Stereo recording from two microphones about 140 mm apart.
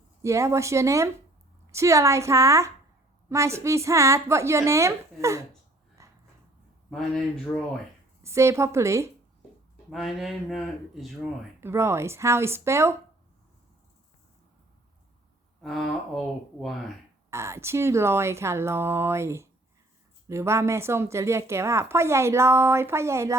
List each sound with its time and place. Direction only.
0.2 s a woman's voice: 20° right (ahead or behind)
6.0 s a sound: 20° right (ahead or behind)
8.2 s a woman's voice: 20° right (ahead or behind)
9.9 s speech: centre (ahead or behind)
11.6 s a woman's voice: 20° right (ahead or behind)
15.6 s speech: centre (ahead or behind)
17.3 s a woman's voice: 20° right (ahead or behind)